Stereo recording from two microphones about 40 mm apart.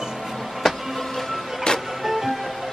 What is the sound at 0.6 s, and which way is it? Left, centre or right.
Music, centre.